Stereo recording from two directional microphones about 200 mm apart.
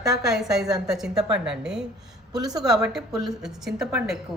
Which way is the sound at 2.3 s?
20° right (ahead or behind).